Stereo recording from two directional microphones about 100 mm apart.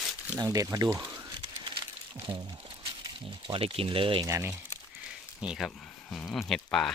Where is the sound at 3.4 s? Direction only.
65° right (ahead or behind).